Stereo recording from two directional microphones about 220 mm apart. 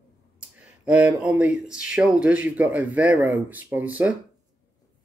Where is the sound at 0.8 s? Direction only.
5° right (ahead or behind).